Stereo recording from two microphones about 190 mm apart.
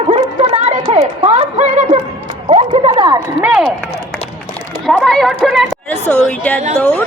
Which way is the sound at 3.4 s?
5° right (ahead or behind).